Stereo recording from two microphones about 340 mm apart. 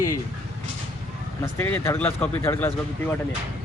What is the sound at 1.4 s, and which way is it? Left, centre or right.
Speech, centre.